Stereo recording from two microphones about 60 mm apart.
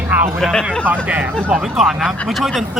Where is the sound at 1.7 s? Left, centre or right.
Centre.